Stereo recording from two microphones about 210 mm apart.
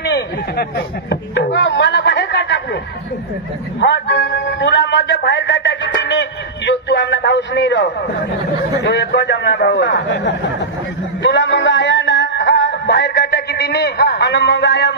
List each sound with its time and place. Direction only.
0.0 s a sound: 50° left (ahead or behind)
3.8 s a man's voice: 55° left (ahead or behind)
11.2 s music: 55° left (ahead or behind)